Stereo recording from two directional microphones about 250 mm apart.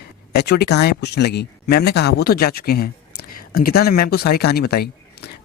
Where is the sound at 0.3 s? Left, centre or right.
Left.